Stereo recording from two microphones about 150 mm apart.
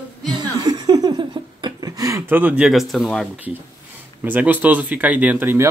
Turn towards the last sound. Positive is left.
turn(degrees=-15)  # may be behind; listen again after turning